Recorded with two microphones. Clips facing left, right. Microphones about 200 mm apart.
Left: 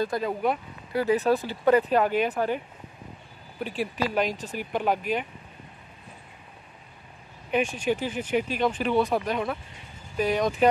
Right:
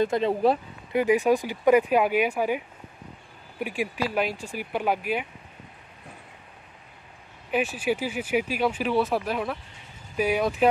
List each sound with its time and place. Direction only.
0.0 s speech: 25° right (ahead or behind)
0.9 s speech: 15° right (ahead or behind)
7.5 s speech: 5° right (ahead or behind)